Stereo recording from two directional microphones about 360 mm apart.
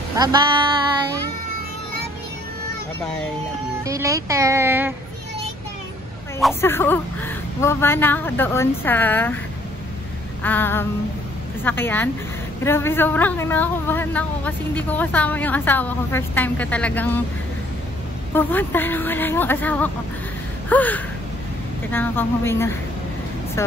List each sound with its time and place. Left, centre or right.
0.1 s a sound: centre
3.8 s speech: centre
6.4 s speech: centre
10.4 s speech: centre
18.3 s speech: centre